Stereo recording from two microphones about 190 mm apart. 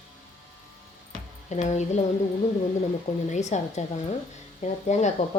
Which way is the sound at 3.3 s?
35° left (ahead or behind).